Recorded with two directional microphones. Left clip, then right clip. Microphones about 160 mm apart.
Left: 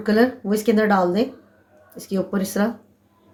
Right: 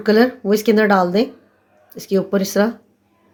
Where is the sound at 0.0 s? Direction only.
55° right (ahead or behind).